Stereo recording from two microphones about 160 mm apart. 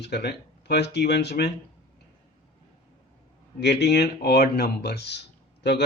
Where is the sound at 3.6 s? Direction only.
90° left.